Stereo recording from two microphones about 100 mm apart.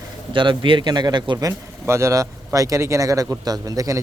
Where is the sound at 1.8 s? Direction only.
30° right (ahead or behind).